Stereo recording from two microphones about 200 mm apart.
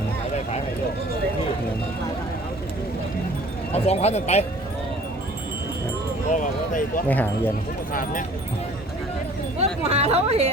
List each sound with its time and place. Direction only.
3.8 s speech: 35° left (ahead or behind)
6.3 s speech: 40° left (ahead or behind)
7.1 s speech: 10° left (ahead or behind)
9.6 s speech: 30° right (ahead or behind)